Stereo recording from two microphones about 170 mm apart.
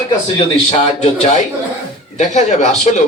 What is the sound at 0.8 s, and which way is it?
A man's voice, 40° left (ahead or behind).